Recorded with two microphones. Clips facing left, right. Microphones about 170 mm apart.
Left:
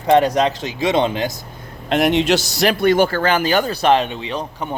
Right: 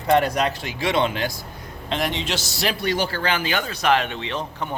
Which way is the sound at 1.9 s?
70° left (ahead or behind).